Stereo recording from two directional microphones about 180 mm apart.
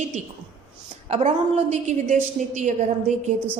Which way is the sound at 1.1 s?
40° right (ahead or behind).